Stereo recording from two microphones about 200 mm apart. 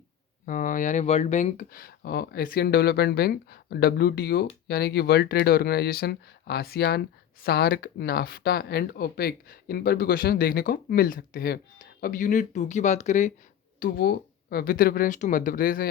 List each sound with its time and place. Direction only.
0.4 s speech: 40° left (ahead or behind)